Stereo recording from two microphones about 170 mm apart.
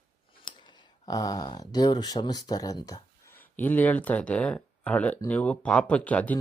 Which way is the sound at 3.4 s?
10° left (ahead or behind).